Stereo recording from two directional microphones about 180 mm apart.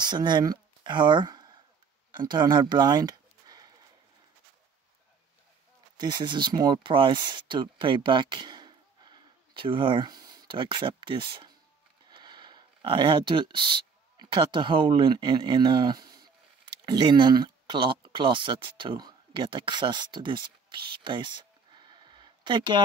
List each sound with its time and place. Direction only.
0.0 s speech: 25° right (ahead or behind)
5.9 s speech: 25° right (ahead or behind)